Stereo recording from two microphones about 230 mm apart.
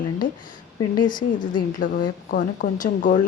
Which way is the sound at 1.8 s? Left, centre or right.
Left.